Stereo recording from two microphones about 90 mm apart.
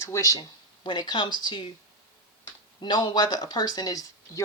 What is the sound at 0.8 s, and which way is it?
Speech, 55° left (ahead or behind).